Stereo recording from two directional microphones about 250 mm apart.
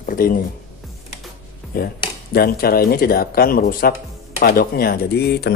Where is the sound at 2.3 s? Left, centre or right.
Left.